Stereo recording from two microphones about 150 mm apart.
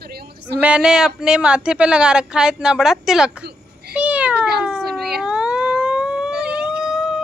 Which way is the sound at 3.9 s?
10° right (ahead or behind).